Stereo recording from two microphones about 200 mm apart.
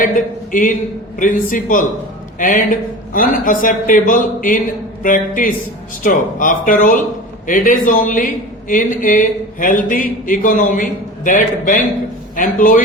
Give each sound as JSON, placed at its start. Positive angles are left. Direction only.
{"t": 0.5, "sound": "a man's voice", "side_deg": 40}